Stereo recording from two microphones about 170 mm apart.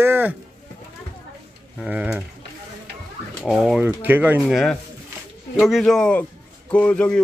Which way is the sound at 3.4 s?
Centre (ahead or behind).